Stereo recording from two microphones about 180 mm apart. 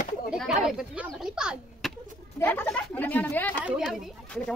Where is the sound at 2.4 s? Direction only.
10° left (ahead or behind).